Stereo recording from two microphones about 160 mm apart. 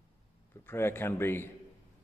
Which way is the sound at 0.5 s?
15° left (ahead or behind).